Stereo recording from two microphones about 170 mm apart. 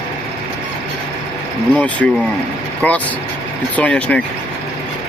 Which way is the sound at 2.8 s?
10° left (ahead or behind).